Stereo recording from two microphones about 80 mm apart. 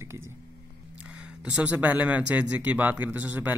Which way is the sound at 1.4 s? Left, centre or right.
Centre.